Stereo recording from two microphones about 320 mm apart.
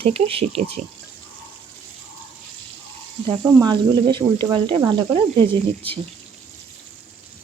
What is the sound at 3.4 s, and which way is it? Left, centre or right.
Speech, centre.